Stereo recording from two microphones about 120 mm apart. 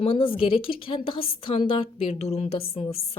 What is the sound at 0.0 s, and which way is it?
A woman's voice, 50° left (ahead or behind).